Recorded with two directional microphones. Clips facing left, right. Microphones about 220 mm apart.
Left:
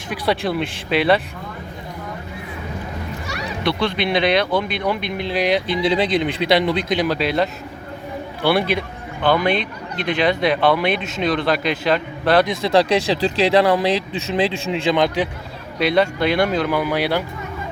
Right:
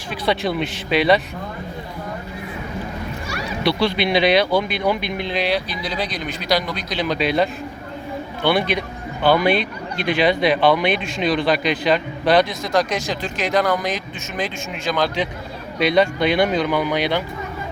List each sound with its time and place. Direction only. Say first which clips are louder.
0.1 s speech: left 1 dB; 5° left (ahead or behind)
3.6 s speech: right 2 dB; 5° right (ahead or behind)
5.4 s speech: left 6 dB; 20° left (ahead or behind)
7.0 s speech: right 4 dB; 5° left (ahead or behind)
8.4 s speech: left 1 dB; 5° left (ahead or behind)
12.6 s speech: left 5 dB; 30° left (ahead or behind)
15.8 s speech: even; centre (ahead or behind)